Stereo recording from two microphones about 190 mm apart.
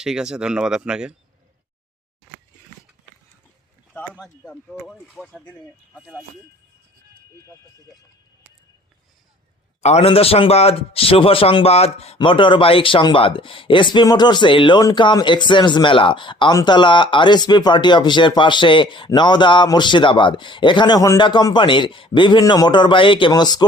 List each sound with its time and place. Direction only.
0.0 s speech: 5° right (ahead or behind)
3.9 s speech: 5° left (ahead or behind)
6.0 s speech: 5° right (ahead or behind)
9.8 s speech: 35° left (ahead or behind)